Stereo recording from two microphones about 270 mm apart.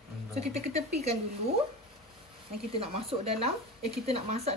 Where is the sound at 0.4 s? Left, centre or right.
Right.